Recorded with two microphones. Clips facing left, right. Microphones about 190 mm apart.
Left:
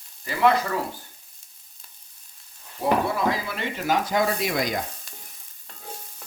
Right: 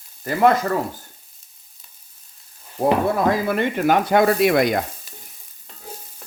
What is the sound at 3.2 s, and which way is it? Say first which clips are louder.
Speech: right 7 dB; 50° right (ahead or behind).